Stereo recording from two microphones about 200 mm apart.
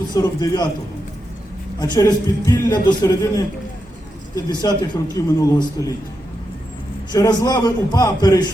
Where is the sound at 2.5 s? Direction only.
20° left (ahead or behind).